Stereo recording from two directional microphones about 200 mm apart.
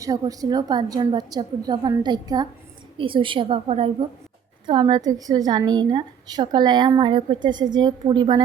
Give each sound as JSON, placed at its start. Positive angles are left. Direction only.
{"t": 0.0, "sound": "a woman's voice", "side_deg": -20}